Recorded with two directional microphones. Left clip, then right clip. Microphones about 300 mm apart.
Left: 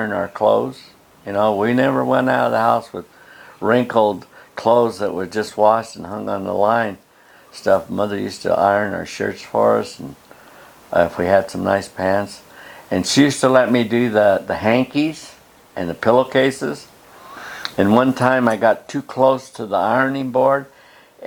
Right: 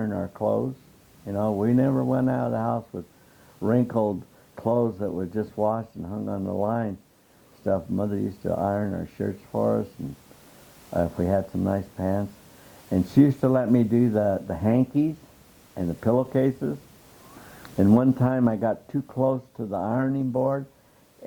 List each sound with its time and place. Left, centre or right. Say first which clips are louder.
0.0 s speech: left 10 dB; centre
0.4 s speech: left 10 dB; left
1.3 s speech: left 8 dB; centre
10.9 s speech: left 10 dB; centre